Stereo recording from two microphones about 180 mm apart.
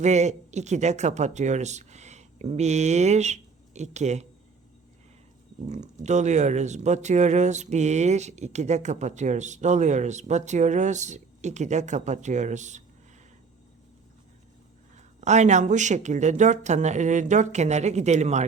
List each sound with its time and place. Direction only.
0.0 s speech: 40° right (ahead or behind)
5.6 s speech: 40° right (ahead or behind)
14.9 s speech: 40° right (ahead or behind)